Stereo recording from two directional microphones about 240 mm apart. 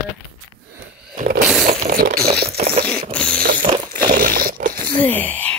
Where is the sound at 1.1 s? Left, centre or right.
Right.